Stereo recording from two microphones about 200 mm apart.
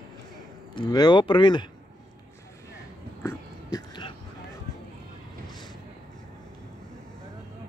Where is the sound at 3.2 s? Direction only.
20° left (ahead or behind).